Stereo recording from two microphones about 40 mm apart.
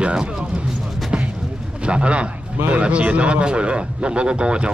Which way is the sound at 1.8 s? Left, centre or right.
Right.